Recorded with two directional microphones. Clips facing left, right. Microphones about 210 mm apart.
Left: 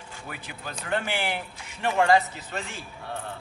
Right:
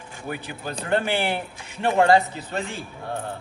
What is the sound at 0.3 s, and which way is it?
A man's voice, 30° right (ahead or behind).